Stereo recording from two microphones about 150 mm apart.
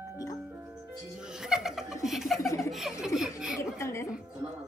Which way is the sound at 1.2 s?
5° right (ahead or behind).